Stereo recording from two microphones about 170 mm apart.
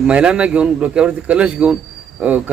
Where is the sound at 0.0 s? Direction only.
5° right (ahead or behind).